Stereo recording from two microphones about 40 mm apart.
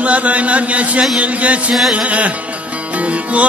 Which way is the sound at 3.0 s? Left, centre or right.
Right.